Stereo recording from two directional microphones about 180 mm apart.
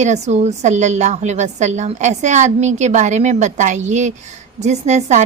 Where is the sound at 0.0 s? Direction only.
40° right (ahead or behind).